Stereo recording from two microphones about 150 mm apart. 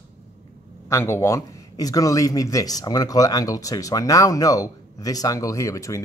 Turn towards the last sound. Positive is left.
turn(degrees=20)  # may be behind; listen again after turning